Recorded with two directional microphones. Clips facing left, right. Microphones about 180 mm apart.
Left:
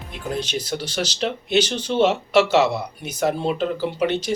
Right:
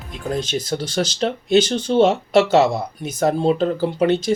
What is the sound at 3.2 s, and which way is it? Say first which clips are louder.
Speech: right 4 dB; 40° right (ahead or behind).